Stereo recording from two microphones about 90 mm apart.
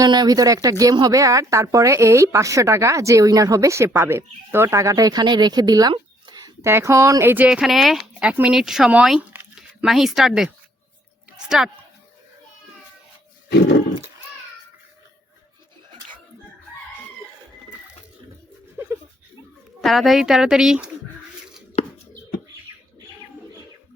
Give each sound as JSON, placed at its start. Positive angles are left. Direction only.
{"t": 0.0, "sound": "a woman's voice", "side_deg": -45}
{"t": 5.9, "sound": "a sound", "side_deg": -50}
{"t": 6.6, "sound": "a woman's voice", "side_deg": -30}
{"t": 7.3, "sound": "speech", "side_deg": -15}
{"t": 7.6, "sound": "speech", "side_deg": 0}
{"t": 8.3, "sound": "speech", "side_deg": -15}
{"t": 8.5, "sound": "speech", "side_deg": -5}
{"t": 11.3, "sound": "a sound", "side_deg": -5}
{"t": 18.8, "sound": "a sound", "side_deg": -25}
{"t": 19.8, "sound": "speech", "side_deg": 0}